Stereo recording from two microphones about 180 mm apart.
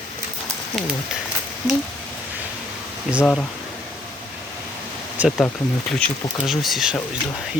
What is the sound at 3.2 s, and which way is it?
Speech, 5° left (ahead or behind).